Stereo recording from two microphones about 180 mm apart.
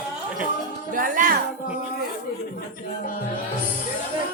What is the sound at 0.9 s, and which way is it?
Speech, 50° right (ahead or behind).